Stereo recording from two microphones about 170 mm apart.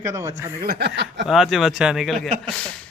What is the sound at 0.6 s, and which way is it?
Speech, 70° right (ahead or behind).